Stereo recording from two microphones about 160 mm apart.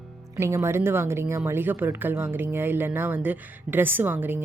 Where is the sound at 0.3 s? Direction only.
20° right (ahead or behind).